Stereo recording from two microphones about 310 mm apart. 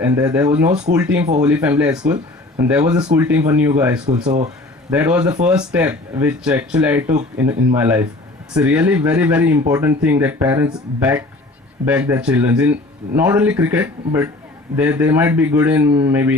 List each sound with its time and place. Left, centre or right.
0.0 s speech: centre
4.2 s speech: right
4.9 s speech: centre